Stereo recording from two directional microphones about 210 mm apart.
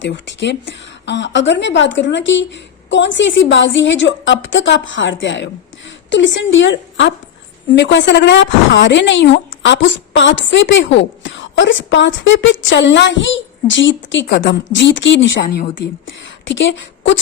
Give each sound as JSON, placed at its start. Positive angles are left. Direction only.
{"t": 0.0, "sound": "a woman's voice", "side_deg": 55}